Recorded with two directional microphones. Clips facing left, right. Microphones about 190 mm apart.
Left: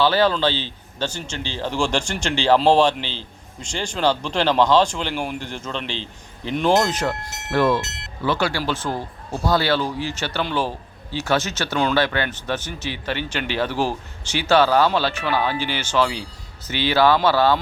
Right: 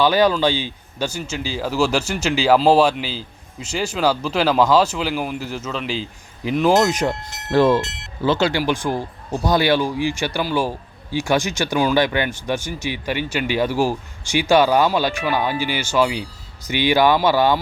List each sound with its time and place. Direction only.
0.0 s a man's voice: 15° right (ahead or behind)
7.5 s a man's voice: 30° right (ahead or behind)